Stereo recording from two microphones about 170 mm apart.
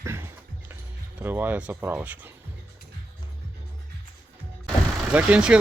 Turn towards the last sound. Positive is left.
turn(degrees=-5)  # may be behind; listen again after turning